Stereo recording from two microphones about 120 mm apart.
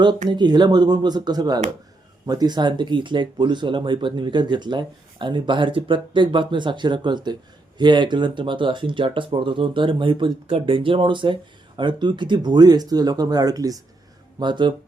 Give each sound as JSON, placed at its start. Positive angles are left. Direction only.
{"t": 0.3, "sound": "speech", "side_deg": -40}
{"t": 14.3, "sound": "speech", "side_deg": -40}